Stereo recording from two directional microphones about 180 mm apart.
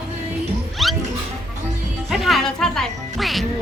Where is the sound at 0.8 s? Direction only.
Centre (ahead or behind).